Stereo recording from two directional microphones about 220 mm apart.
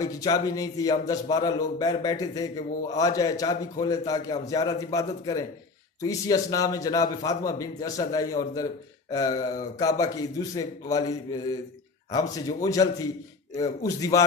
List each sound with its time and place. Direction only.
0.0 s a man's voice: 15° left (ahead or behind)